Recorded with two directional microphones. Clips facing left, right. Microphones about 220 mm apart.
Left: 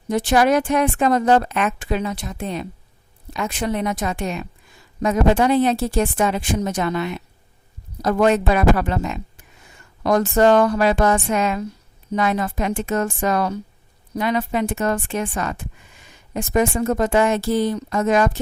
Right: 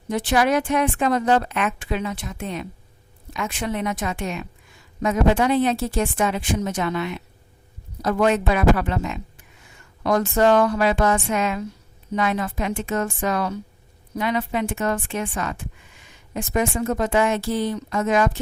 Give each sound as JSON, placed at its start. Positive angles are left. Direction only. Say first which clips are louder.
{"t": 0.1, "sound": "a woman's voice", "louder": "left 3 dB", "side_deg": 40}